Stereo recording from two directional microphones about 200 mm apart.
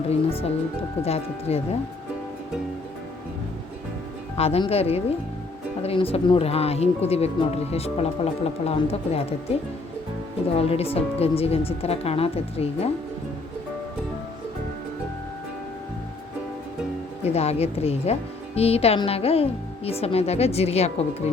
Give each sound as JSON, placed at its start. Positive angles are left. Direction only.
{"t": 0.1, "sound": "a woman's voice", "side_deg": 30}
{"t": 4.4, "sound": "a woman's voice", "side_deg": 30}
{"t": 10.6, "sound": "speech", "side_deg": 30}
{"t": 17.2, "sound": "a woman's voice", "side_deg": 30}